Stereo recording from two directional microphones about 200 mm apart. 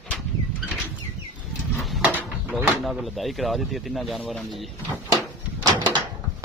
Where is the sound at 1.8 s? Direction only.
5° right (ahead or behind).